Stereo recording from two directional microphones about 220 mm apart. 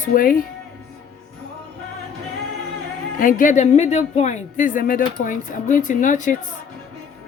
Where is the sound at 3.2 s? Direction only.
35° left (ahead or behind).